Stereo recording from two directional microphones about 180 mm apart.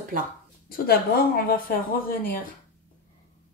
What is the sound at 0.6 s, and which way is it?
Speech, 60° left (ahead or behind).